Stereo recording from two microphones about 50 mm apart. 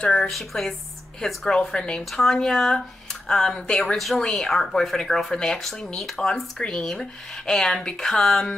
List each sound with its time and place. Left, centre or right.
0.0 s speech: centre
0.3 s a woman's voice: centre